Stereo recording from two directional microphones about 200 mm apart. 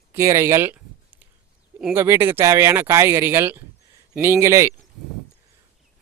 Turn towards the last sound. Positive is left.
turn(degrees=-15)  # may be behind; listen again after turning